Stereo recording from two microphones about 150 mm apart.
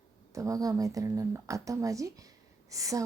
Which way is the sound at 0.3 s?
25° right (ahead or behind).